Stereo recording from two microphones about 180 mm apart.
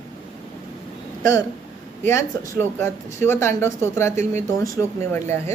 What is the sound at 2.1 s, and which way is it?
Speech, 15° left (ahead or behind).